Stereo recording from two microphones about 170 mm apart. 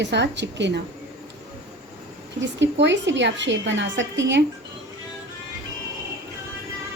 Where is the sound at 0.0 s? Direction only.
90° right.